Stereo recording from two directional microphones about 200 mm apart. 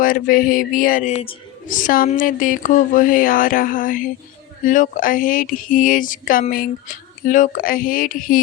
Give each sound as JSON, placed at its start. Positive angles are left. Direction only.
{"t": 0.0, "sound": "speech", "side_deg": 45}
{"t": 1.6, "sound": "speech", "side_deg": 40}